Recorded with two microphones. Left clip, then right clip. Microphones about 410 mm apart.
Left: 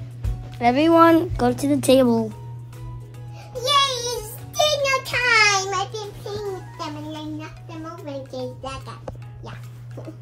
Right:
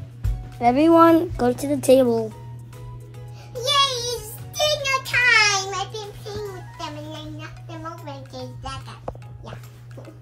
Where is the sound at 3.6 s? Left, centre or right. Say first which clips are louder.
Left 1 dB; centre.